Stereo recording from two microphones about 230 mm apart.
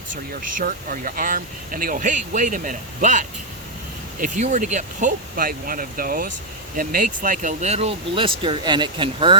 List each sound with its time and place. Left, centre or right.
0.6 s speech: right